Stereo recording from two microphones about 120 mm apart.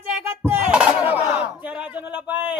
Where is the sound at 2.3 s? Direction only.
15° right (ahead or behind).